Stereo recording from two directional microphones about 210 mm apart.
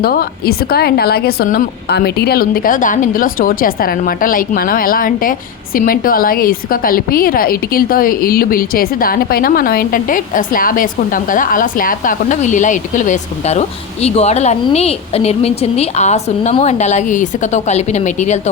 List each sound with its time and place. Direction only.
0.0 s a woman's voice: 45° left (ahead or behind)